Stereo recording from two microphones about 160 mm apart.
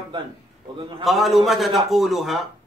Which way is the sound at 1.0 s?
Centre (ahead or behind).